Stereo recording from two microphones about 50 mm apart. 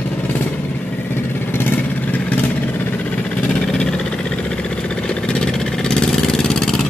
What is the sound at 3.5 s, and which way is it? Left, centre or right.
Vehicle, centre.